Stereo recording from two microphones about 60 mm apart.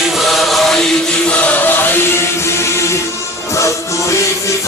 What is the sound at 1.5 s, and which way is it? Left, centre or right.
Chant, left.